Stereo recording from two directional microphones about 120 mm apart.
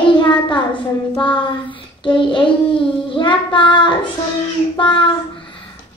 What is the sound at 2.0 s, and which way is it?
Child singing, 45° left (ahead or behind).